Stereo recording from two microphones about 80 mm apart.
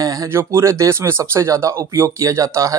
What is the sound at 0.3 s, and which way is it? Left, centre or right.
Speech, right.